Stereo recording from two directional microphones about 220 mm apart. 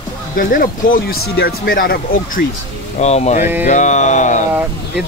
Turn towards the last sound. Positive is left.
turn(degrees=35)  # may be behind; listen again after turning